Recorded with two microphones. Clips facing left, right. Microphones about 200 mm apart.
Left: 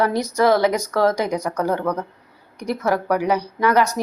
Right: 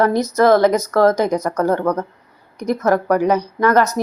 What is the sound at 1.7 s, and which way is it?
Speech, 45° right (ahead or behind).